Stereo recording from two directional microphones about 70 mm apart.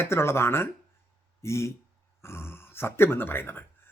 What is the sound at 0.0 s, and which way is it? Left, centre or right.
A man's voice, left.